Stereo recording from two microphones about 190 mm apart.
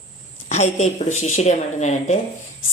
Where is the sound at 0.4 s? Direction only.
35° left (ahead or behind).